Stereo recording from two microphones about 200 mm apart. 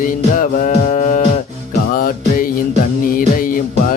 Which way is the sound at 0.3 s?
40° left (ahead or behind).